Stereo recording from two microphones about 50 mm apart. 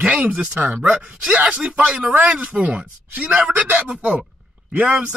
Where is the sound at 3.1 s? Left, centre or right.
Right.